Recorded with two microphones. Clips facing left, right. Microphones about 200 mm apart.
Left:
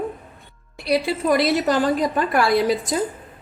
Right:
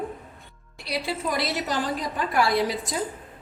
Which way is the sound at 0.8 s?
60° left (ahead or behind).